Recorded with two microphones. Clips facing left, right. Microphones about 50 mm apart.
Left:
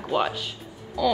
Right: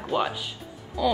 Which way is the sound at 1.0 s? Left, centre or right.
Centre.